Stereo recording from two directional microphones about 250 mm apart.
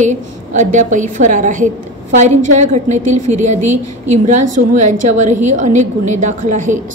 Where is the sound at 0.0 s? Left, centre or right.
Right.